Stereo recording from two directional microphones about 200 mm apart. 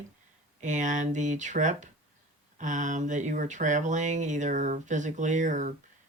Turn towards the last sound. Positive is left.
turn(degrees=-40)  # may be behind; listen again after turning